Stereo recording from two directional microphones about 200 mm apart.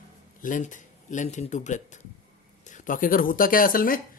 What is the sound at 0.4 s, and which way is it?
A man's voice, 40° left (ahead or behind).